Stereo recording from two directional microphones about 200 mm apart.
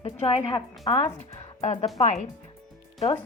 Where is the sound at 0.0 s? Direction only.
30° left (ahead or behind).